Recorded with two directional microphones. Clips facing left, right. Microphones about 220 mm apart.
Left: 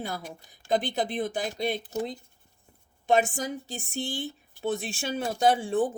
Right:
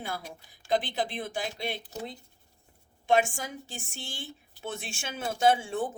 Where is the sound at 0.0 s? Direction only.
40° left (ahead or behind).